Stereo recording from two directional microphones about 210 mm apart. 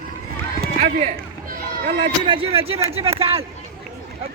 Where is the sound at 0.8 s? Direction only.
45° right (ahead or behind).